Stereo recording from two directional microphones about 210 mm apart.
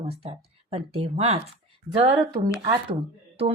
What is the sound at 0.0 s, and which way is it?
Speech, 25° right (ahead or behind).